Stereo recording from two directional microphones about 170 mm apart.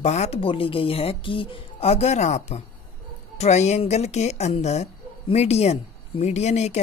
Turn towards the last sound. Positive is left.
turn(degrees=40)  # may be behind; listen again after turning